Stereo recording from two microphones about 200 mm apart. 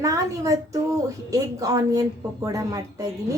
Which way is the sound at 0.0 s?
15° right (ahead or behind).